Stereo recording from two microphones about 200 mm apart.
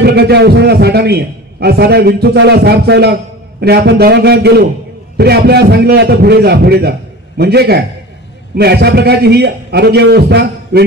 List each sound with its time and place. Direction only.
0.0 s a man's voice: 55° right (ahead or behind)